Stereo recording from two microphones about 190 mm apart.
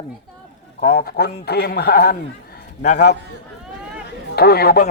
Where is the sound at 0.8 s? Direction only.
50° left (ahead or behind).